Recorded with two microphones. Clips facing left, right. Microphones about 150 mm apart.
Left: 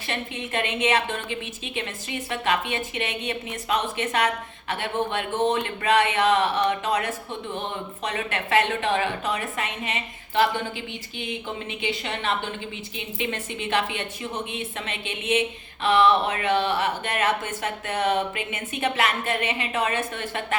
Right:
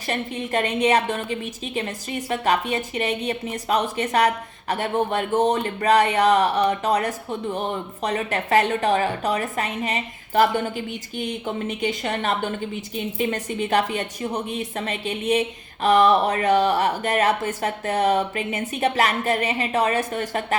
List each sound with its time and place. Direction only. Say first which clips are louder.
0.1 s a woman's voice: right 5 dB; 40° right (ahead or behind)